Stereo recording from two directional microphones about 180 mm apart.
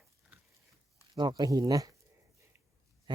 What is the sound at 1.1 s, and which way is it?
Speech, 25° right (ahead or behind).